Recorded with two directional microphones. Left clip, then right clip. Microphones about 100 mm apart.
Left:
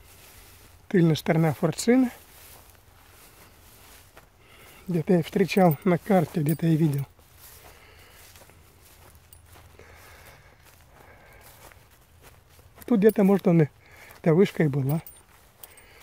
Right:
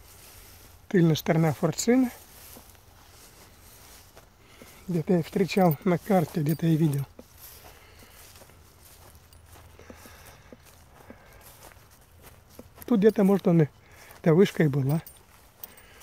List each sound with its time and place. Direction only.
0.8 s speech: 30° left (ahead or behind); by 2.1 s 50° left (ahead or behind)
4.8 s speech: 60° left (ahead or behind)
5.9 s speech: 35° left (ahead or behind)
9.8 s walk: 25° left (ahead or behind)
11.3 s walk: 15° left (ahead or behind)
12.7 s speech: 25° left (ahead or behind)
13.9 s speech: 15° left (ahead or behind)